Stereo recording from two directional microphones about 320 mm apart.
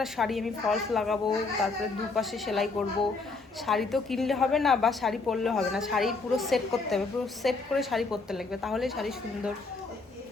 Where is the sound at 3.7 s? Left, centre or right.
Centre.